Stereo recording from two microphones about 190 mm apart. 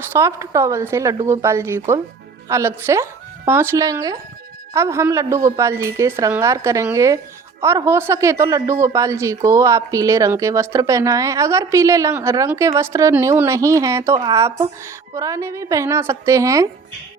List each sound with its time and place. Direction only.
0.1 s a woman's voice: 15° right (ahead or behind)